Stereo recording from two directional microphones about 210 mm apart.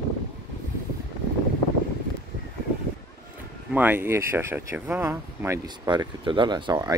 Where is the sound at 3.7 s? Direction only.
10° right (ahead or behind).